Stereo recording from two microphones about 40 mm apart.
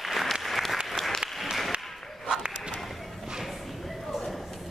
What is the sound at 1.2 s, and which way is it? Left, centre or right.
Applause, centre.